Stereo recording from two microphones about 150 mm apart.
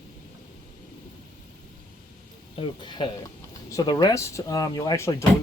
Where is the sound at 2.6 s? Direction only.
35° left (ahead or behind).